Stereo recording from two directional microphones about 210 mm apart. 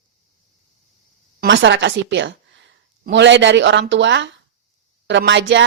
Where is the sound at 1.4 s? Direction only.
60° right (ahead or behind).